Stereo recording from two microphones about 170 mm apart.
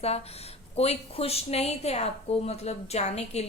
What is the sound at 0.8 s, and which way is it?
A woman's voice, 35° left (ahead or behind).